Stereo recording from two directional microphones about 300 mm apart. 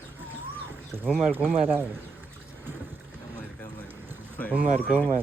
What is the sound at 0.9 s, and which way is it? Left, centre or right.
Speech, centre.